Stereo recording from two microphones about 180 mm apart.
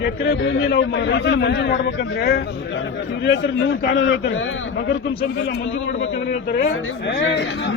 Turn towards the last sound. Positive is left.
turn(degrees=90)